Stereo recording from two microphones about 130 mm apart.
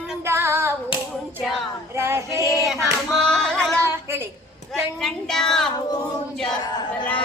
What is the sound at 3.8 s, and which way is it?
Speech, 20° right (ahead or behind).